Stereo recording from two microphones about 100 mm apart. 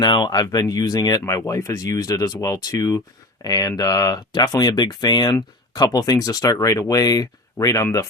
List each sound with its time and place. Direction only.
0.0 s speech: 45° left (ahead or behind)